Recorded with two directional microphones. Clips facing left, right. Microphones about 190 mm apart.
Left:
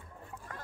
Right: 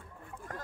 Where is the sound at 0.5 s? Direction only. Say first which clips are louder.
Right 4 dB; 45° right (ahead or behind).